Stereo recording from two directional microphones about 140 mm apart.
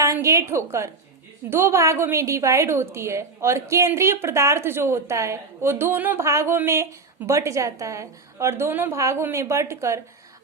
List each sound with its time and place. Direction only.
0.0 s a woman's voice: 20° right (ahead or behind)